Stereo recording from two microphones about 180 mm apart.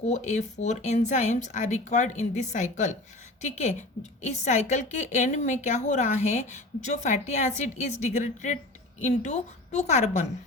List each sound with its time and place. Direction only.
0.1 s speech: 40° left (ahead or behind)